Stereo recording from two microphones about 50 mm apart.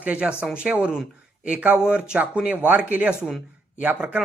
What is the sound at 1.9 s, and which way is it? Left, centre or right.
Speech, centre.